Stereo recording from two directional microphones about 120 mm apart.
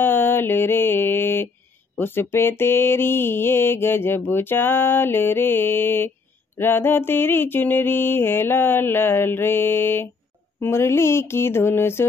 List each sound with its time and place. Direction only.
0.0 s mantra: 20° left (ahead or behind)
2.0 s speech: 20° left (ahead or behind)
2.3 s mantra: 20° left (ahead or behind)